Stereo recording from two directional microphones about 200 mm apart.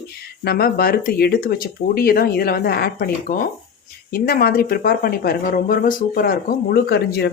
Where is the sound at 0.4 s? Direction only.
50° left (ahead or behind).